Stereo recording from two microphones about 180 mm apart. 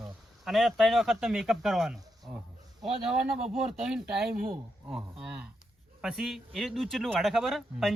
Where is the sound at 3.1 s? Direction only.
5° right (ahead or behind).